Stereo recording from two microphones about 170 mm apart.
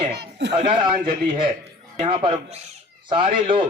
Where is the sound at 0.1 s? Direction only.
90° right.